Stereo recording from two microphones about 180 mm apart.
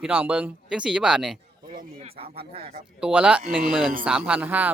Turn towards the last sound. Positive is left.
turn(degrees=-10)  # may be behind; listen again after turning